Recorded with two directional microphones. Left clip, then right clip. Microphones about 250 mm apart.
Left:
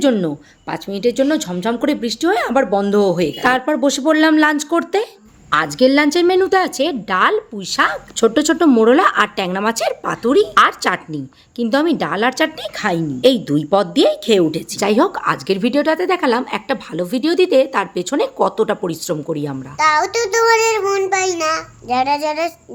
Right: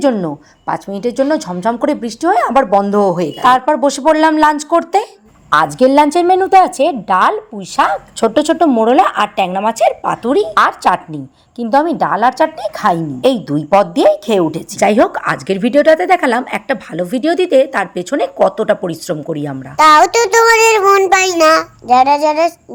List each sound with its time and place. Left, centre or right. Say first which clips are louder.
0.0 s a woman's voice: right 2 dB; centre
5.5 s a woman's voice: right 4 dB; centre
14.8 s a woman's voice: right 5 dB; centre
19.7 s child singing: right 8 dB; right
21.8 s a woman's voice: right 7 dB; centre